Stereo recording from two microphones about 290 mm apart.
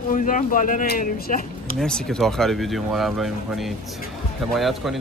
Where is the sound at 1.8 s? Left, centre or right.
Centre.